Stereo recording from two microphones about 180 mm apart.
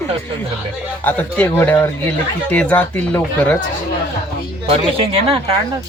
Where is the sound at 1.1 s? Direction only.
10° left (ahead or behind).